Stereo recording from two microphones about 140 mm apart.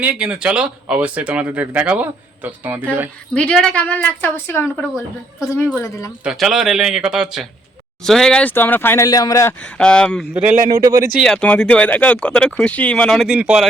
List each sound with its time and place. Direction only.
0.0 s speech: 10° right (ahead or behind)
3.3 s speech: 5° left (ahead or behind)
5.4 s a man's voice: 5° left (ahead or behind)
9.0 s a man's voice: 25° left (ahead or behind)
9.6 s speech: 10° left (ahead or behind)
10.5 s speech: 60° right (ahead or behind)
10.8 s speech: 25° right (ahead or behind)
11.2 s speech: 5° left (ahead or behind)